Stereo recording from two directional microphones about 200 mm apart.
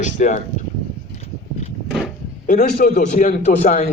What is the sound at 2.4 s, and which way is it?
Speech, 40° left (ahead or behind).